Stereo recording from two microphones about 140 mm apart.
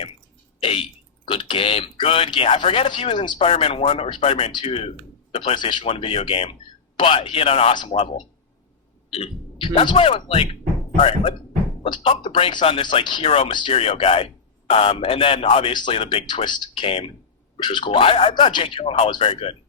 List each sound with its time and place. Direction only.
0.6 s speech: 40° left (ahead or behind)
13.7 s speech: 45° left (ahead or behind)